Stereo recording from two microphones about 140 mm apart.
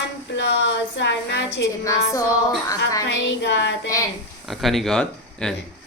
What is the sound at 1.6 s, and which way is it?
A woman's voice, 25° left (ahead or behind).